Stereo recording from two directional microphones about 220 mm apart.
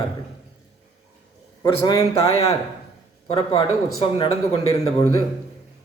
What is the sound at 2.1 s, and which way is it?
A man's voice, 25° left (ahead or behind).